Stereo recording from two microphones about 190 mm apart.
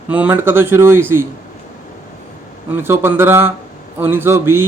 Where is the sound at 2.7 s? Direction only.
10° right (ahead or behind).